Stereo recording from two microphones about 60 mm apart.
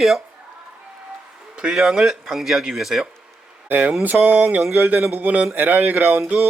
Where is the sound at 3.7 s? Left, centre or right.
Right.